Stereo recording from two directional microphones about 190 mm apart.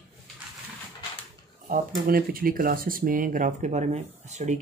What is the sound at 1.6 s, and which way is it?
Speech, 50° right (ahead or behind).